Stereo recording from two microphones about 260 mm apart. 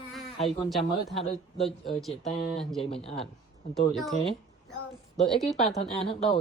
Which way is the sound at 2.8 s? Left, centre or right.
Left.